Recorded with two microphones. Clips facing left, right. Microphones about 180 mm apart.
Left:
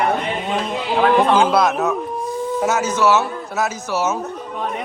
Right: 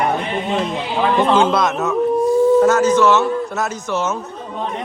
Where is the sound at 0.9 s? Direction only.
Centre (ahead or behind).